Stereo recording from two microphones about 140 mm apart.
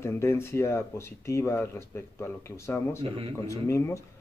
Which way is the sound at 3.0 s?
45° right (ahead or behind).